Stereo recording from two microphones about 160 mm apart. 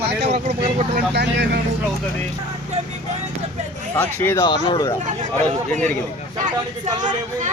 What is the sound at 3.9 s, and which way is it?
Speech, 10° left (ahead or behind).